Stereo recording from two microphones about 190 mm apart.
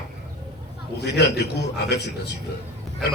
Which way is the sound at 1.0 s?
60° left (ahead or behind).